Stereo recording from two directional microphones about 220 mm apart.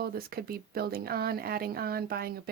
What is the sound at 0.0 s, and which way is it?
Speech, 45° right (ahead or behind).